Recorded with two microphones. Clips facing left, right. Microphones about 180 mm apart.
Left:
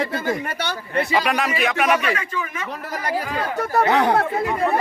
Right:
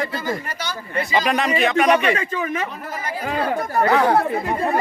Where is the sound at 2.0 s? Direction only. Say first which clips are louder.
Right 3 dB; 30° right (ahead or behind).